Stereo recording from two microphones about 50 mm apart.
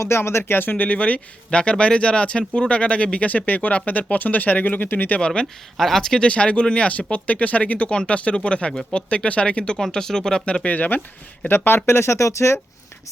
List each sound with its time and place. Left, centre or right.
0.0 s speech: left
0.8 s speech: left
5.2 s speech: centre
5.7 s speech: centre
6.2 s speech: left
9.7 s speech: centre
10.7 s speech: left
11.4 s speech: left